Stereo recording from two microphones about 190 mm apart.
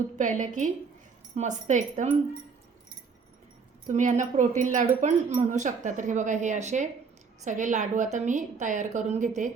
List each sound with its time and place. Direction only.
0.2 s speech: 40° right (ahead or behind)
3.8 s speech: 40° right (ahead or behind)